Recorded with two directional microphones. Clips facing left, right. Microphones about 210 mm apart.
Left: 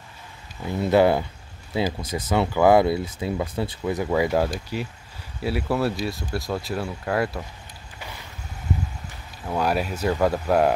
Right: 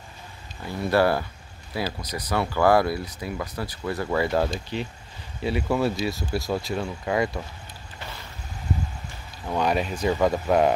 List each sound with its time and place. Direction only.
0.7 s speech: 20° left (ahead or behind); by 7.4 s centre (ahead or behind)
9.5 s speech: 5° left (ahead or behind)